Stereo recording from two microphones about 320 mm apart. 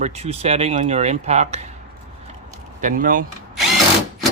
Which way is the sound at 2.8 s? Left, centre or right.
Right.